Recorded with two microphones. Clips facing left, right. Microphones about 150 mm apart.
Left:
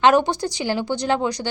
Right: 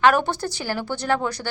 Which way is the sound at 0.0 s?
20° left (ahead or behind).